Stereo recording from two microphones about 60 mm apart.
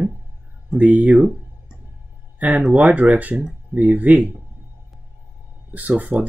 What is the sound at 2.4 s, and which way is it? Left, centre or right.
Speech, centre.